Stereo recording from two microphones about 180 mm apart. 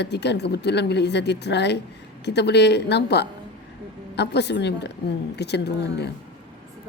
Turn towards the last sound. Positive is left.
turn(degrees=65)  # may be behind; listen again after turning